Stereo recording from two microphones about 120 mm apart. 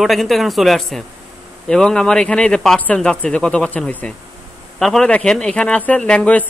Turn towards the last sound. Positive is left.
turn(degrees=10)  # may be behind; listen again after turning